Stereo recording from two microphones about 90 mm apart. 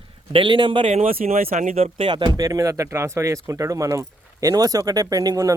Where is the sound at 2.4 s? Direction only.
40° right (ahead or behind).